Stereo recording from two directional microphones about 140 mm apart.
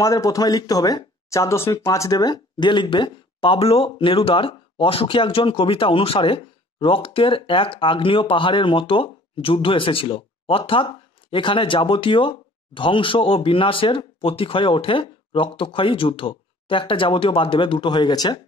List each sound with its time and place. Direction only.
0.0 s speech: 25° left (ahead or behind)